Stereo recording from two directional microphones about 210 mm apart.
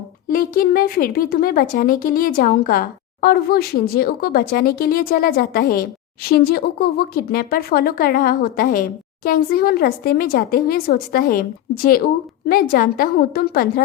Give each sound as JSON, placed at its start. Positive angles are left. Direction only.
{"t": 0.3, "sound": "speech", "side_deg": 45}